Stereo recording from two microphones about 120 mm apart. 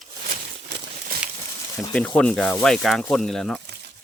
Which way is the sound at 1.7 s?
5° left (ahead or behind).